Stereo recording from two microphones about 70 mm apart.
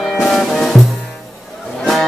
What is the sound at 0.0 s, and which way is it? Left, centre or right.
Music, centre.